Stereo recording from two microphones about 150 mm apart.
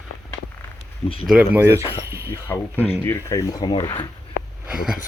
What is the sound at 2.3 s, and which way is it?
Speech, 15° left (ahead or behind).